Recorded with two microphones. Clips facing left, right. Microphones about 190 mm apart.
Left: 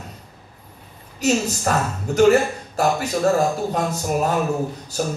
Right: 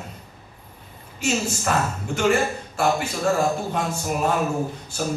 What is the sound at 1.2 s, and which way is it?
Speech, 40° left (ahead or behind).